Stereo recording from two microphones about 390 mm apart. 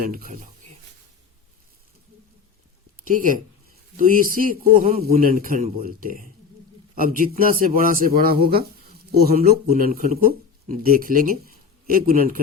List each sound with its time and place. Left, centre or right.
3.0 s a man's voice: right